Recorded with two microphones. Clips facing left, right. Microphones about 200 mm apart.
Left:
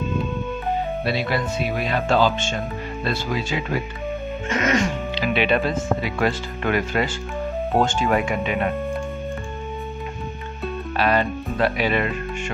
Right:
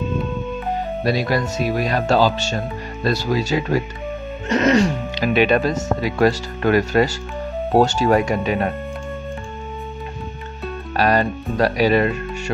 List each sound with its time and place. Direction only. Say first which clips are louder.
1.0 s speech: right 7 dB; 40° right (ahead or behind)
11.0 s speech: right 3 dB; 40° right (ahead or behind)